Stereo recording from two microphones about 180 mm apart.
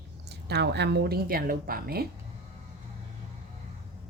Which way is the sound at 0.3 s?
65° right (ahead or behind).